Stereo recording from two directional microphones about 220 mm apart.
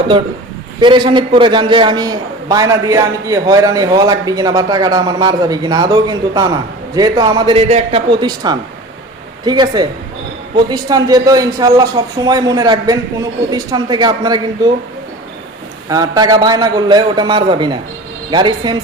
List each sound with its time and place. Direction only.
0.8 s a man's voice: 20° right (ahead or behind)
15.9 s a man's voice: 15° right (ahead or behind)